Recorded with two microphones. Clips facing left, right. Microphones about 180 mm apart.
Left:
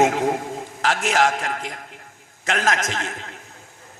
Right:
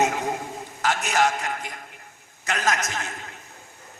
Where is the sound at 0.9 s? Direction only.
90° left.